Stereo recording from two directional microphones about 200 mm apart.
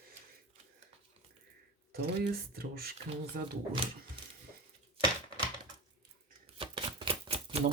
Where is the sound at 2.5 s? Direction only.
50° right (ahead or behind).